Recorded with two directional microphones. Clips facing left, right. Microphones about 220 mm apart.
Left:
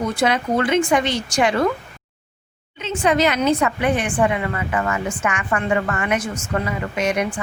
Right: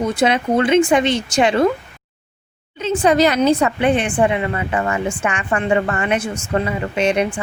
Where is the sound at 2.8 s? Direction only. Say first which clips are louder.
Right 4 dB; 35° right (ahead or behind).